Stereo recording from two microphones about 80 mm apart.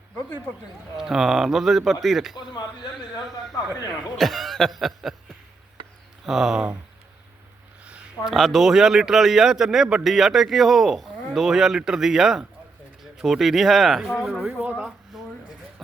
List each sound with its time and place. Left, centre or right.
0.9 s speech: centre
2.3 s a man's voice: left
4.2 s speech: centre
6.2 s speech: centre
8.2 s speech: centre
14.4 s speech: centre
15.1 s a sound: centre